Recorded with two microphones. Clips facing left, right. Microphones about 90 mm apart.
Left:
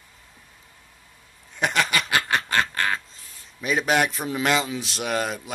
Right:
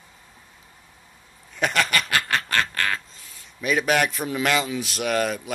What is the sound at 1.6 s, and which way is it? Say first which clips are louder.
Quack: even; 15° left (ahead or behind).